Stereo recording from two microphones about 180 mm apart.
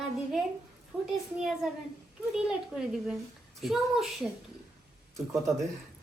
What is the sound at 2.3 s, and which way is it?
A woman's voice, 5° right (ahead or behind).